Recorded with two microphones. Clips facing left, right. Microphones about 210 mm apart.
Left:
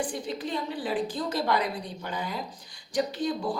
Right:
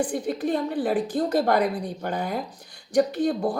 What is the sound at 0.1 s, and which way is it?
A woman's voice, 55° right (ahead or behind).